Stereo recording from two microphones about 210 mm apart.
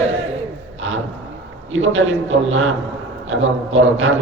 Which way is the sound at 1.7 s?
65° right (ahead or behind).